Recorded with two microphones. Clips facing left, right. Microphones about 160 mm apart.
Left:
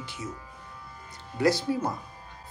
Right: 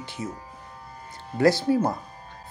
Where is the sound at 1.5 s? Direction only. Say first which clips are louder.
Right 5 dB; 30° right (ahead or behind).